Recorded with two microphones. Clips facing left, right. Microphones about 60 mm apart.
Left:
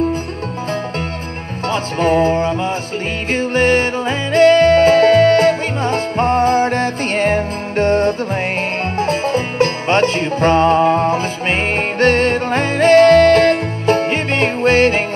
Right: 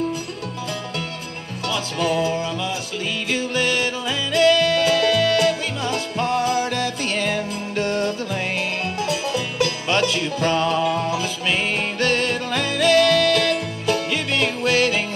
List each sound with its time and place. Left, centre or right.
1.7 s music: left